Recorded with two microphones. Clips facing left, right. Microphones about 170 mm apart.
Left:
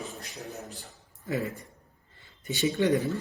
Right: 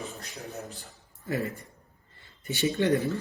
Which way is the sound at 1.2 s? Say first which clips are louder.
Even; 20° left (ahead or behind).